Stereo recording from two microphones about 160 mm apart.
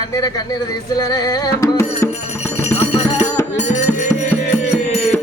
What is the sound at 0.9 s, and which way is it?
A man's voice, 25° left (ahead or behind).